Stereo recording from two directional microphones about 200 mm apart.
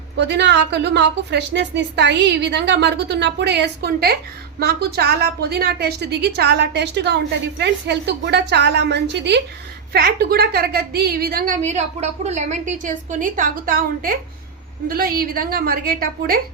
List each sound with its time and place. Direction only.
0.2 s a woman's voice: 60° right (ahead or behind)